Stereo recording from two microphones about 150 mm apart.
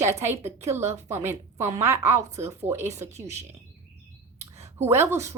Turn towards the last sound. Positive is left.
turn(degrees=-15)  # may be behind; listen again after turning